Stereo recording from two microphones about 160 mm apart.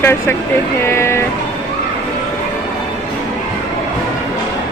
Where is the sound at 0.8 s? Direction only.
15° left (ahead or behind).